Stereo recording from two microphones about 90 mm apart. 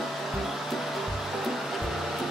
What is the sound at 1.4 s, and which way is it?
Music, centre (ahead or behind).